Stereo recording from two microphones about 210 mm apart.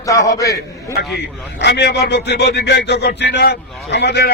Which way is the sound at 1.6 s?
55° left (ahead or behind).